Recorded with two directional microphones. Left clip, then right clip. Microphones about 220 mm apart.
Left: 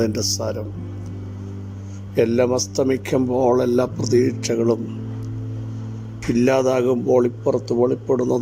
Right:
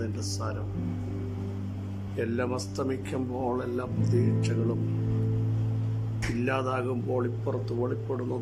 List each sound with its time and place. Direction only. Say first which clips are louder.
0.0 s speech: left 13 dB; 30° left (ahead or behind)
2.1 s speech: left 13 dB; 30° left (ahead or behind)
6.4 s speech: left 12 dB; 30° left (ahead or behind)